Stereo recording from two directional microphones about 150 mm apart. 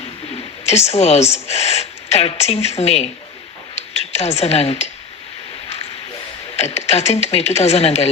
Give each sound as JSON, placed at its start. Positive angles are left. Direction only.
{"t": 0.3, "sound": "speech", "side_deg": 45}
{"t": 6.6, "sound": "speech", "side_deg": 45}